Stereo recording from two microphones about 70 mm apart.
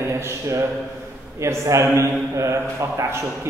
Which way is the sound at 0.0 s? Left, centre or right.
Right.